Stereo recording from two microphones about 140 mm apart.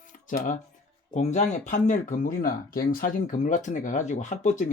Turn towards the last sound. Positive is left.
turn(degrees=60)  # may be behind; listen again after turning